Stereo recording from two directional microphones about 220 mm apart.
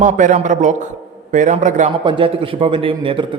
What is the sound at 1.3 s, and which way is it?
Speech, 35° right (ahead or behind).